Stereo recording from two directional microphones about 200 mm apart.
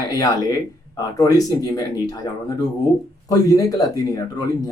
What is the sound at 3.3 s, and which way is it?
Speech, 20° left (ahead or behind).